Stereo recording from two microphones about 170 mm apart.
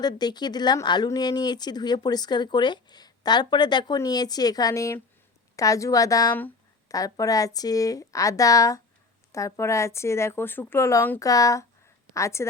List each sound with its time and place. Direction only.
0.2 s a woman's voice: 25° left (ahead or behind)